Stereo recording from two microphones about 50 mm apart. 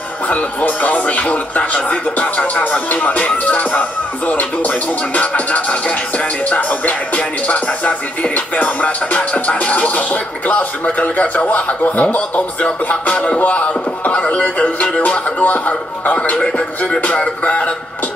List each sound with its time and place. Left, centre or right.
0.3 s a man's voice: left